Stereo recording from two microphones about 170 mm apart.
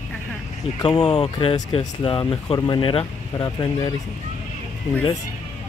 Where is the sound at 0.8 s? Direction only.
25° left (ahead or behind).